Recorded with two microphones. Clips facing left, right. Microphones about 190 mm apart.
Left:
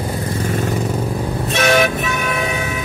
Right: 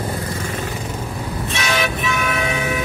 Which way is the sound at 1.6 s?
50° left (ahead or behind).